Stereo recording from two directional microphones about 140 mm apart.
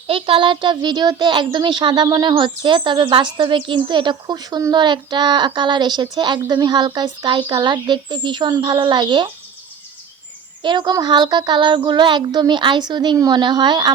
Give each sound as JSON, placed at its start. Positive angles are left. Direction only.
{"t": 0.1, "sound": "a child's voice", "side_deg": -40}
{"t": 10.6, "sound": "a child's voice", "side_deg": -35}